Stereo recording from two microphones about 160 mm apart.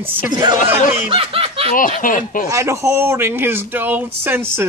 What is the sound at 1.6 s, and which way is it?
Speech, 55° left (ahead or behind).